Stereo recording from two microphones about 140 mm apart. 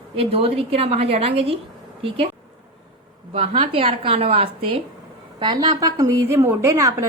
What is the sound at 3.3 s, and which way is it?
A woman's voice, 45° right (ahead or behind).